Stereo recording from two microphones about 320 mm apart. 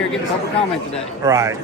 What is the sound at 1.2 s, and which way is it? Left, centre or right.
Speech, centre.